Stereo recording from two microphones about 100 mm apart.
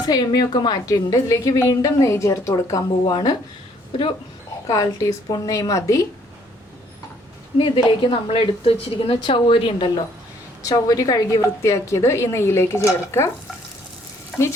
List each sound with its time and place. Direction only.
0.0 s a woman's voice: 40° left (ahead or behind)
4.7 s a woman's voice: 35° left (ahead or behind)
7.9 s a woman's voice: 60° left (ahead or behind)
10.6 s a woman's voice: 35° left (ahead or behind)